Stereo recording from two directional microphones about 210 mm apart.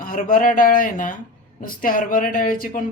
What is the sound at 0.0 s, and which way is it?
Speech, 40° left (ahead or behind).